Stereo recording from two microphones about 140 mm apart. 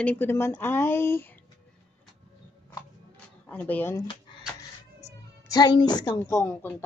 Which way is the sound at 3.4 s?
10° left (ahead or behind).